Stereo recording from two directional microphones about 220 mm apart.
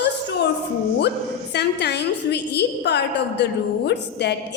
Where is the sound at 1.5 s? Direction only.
50° left (ahead or behind).